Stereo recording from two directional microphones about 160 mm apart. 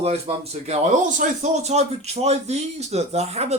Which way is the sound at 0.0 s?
40° right (ahead or behind).